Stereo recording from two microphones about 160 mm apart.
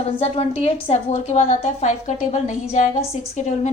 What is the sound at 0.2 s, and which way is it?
A woman's voice, 40° left (ahead or behind).